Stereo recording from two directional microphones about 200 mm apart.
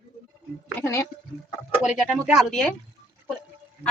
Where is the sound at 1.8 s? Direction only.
5° right (ahead or behind).